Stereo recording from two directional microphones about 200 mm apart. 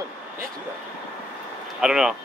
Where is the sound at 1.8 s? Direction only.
5° right (ahead or behind).